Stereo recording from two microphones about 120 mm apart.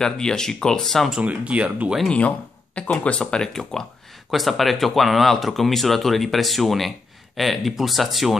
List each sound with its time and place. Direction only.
0.0 s speech: 5° left (ahead or behind)
1.2 s speech: 10° right (ahead or behind)
2.0 s speech: 10° left (ahead or behind)